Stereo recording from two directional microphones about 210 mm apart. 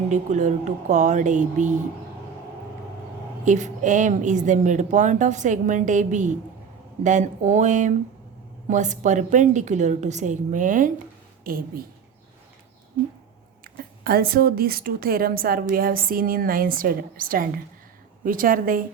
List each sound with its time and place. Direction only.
0.1 s a woman's voice: 35° right (ahead or behind)
3.4 s a woman's voice: 35° right (ahead or behind)
13.7 s a sound: 45° right (ahead or behind)
14.0 s a woman's voice: 45° right (ahead or behind)